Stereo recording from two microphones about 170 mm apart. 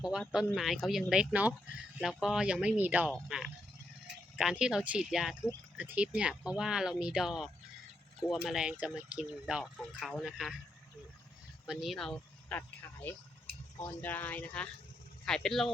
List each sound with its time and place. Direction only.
0.0 s speech: 5° right (ahead or behind)
11.6 s speech: centre (ahead or behind)
13.5 s a sound: 65° right (ahead or behind)
13.8 s speech: 10° left (ahead or behind)